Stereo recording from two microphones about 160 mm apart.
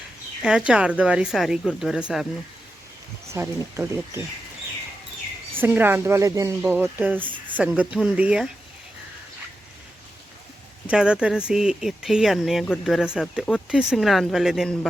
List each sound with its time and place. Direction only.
0.7 s speech: 5° right (ahead or behind)
3.3 s speech: 15° right (ahead or behind)
5.5 s speech: 15° right (ahead or behind)
10.8 s speech: 5° right (ahead or behind)